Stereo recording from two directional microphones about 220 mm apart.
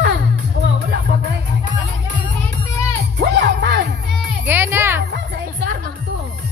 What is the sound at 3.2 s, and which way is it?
Music, 50° right (ahead or behind).